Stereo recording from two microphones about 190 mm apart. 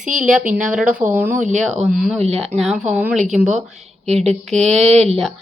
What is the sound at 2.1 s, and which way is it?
Speech, 35° right (ahead or behind).